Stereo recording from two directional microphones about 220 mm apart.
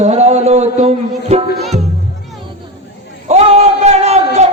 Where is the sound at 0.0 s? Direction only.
30° right (ahead or behind).